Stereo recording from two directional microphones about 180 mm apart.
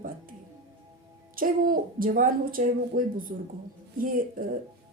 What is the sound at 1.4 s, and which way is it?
A woman's voice, 50° right (ahead or behind).